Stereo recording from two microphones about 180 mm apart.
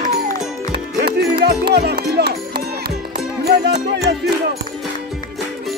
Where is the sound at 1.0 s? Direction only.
65° right (ahead or behind).